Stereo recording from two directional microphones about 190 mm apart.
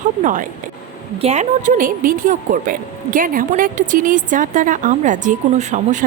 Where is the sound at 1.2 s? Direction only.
35° right (ahead or behind).